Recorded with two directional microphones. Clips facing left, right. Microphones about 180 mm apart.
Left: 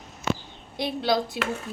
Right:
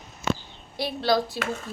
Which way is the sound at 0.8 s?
20° left (ahead or behind).